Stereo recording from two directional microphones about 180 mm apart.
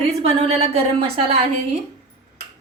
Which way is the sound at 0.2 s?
35° right (ahead or behind).